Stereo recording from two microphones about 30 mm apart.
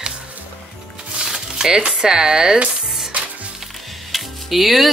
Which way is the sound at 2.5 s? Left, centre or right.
Right.